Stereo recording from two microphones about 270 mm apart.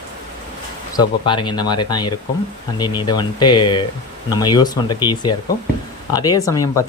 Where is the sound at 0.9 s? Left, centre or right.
Centre.